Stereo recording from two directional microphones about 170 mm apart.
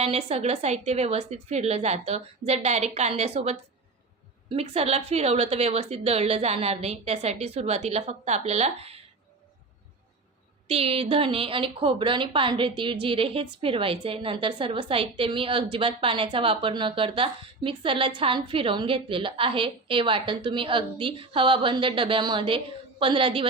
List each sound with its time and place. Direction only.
0.0 s a woman's voice: 35° right (ahead or behind)
10.7 s a woman's voice: 35° right (ahead or behind)